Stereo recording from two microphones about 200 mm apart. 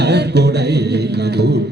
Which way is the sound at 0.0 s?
55° right (ahead or behind).